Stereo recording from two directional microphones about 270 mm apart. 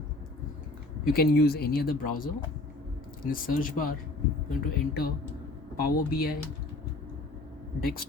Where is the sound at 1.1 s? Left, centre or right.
Left.